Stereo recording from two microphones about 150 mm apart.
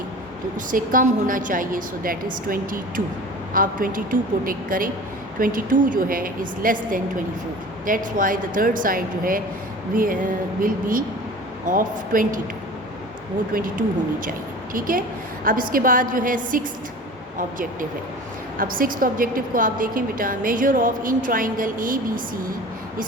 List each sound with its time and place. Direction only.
0.7 s a woman's voice: 65° right (ahead or behind)
13.5 s a woman's voice: 65° right (ahead or behind)